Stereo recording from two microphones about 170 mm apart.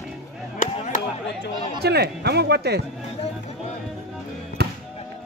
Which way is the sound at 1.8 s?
70° right (ahead or behind).